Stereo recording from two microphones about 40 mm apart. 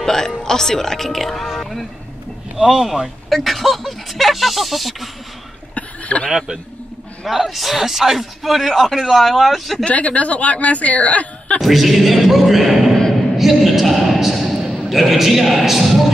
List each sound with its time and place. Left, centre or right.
0.0 s speech: centre
1.6 s a sound: centre
2.5 s speech: centre
3.3 s a man's voice: centre
5.8 s a sound: left
6.3 s speech: centre
7.2 s a man's voice: centre
9.8 s a woman's voice: left
11.6 s a man's voice: centre
13.4 s a sound: centre
14.9 s a man's voice: centre